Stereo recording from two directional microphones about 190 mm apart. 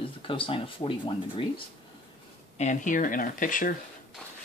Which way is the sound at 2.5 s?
40° left (ahead or behind).